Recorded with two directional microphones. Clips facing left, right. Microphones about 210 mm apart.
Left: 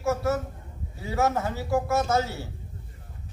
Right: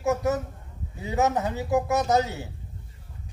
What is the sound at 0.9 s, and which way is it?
A man's voice, 20° right (ahead or behind).